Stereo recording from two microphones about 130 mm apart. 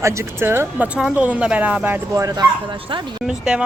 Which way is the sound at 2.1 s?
30° right (ahead or behind).